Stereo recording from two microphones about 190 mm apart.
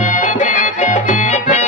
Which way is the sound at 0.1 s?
40° left (ahead or behind).